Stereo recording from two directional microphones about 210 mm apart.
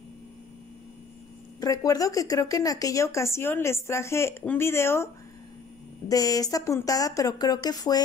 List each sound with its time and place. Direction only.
1.6 s speech: 15° left (ahead or behind)